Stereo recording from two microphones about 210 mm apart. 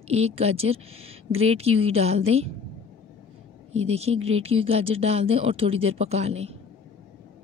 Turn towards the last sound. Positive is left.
turn(degrees=-30)  # may be behind; listen again after turning